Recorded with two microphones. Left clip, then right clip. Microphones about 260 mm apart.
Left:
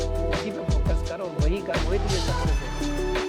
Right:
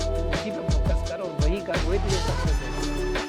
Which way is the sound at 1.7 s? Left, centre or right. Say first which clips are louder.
Right 1 dB; centre.